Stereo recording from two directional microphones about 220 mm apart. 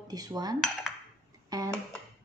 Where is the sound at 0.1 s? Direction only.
15° right (ahead or behind).